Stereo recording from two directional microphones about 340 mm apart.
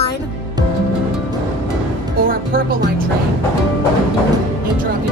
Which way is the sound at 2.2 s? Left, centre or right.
Right.